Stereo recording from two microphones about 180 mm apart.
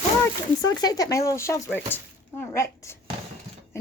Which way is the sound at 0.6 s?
20° left (ahead or behind).